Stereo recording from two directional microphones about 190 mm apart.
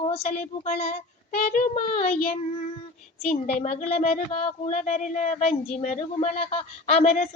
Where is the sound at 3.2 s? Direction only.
35° left (ahead or behind).